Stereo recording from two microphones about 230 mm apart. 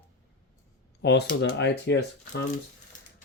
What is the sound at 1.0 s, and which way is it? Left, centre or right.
Speech, left.